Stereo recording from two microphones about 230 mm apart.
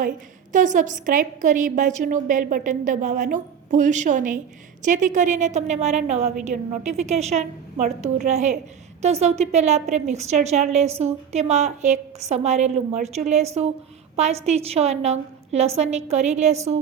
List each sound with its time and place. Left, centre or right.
0.5 s a woman's voice: right